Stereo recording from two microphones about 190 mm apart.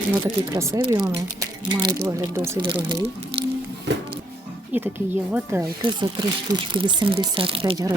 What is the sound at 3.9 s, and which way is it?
Music, 70° right (ahead or behind).